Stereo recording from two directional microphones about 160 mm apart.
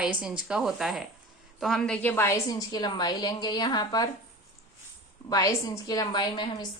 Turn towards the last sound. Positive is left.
turn(degrees=25)  # may be behind; listen again after turning